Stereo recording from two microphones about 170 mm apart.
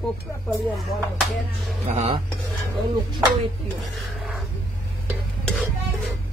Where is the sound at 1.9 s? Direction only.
40° right (ahead or behind).